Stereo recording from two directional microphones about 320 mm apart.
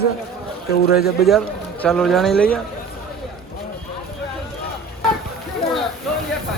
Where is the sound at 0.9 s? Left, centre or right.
Left.